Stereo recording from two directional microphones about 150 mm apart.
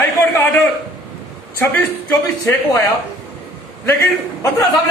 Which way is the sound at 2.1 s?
20° left (ahead or behind).